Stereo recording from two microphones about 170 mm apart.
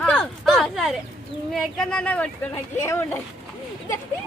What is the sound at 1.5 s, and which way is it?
A woman's voice, centre (ahead or behind).